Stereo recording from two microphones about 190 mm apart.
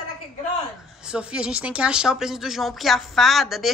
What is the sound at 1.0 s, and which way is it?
Speech, 5° right (ahead or behind).